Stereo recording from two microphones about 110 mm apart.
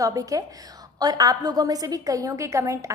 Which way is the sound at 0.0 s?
30° right (ahead or behind).